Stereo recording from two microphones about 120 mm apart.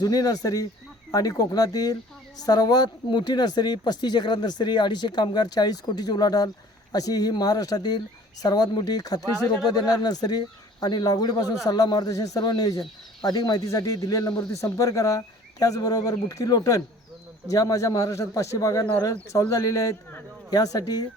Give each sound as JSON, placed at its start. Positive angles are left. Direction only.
{"t": 0.0, "sound": "a man's voice", "side_deg": 30}